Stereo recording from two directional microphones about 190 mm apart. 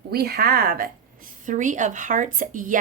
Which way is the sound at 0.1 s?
55° right (ahead or behind).